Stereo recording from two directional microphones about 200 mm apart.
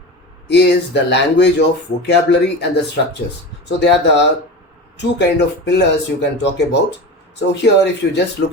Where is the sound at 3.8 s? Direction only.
60° left (ahead or behind).